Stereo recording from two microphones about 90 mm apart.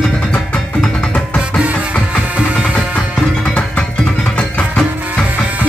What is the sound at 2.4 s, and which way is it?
Music, 10° right (ahead or behind).